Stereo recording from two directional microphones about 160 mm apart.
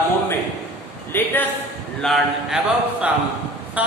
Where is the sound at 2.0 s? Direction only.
Centre (ahead or behind).